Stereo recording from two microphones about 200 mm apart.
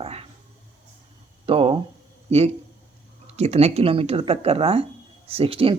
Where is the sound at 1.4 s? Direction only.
30° right (ahead or behind).